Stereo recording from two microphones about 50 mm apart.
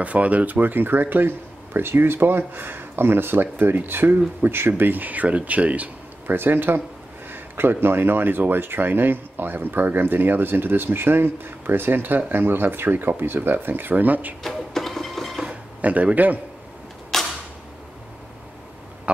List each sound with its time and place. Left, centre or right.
0.0 s speech: right
6.2 s speech: right
7.2 s a sound: right
7.8 s speech: right
14.4 s printer: centre
15.8 s speech: right
17.1 s a sound: centre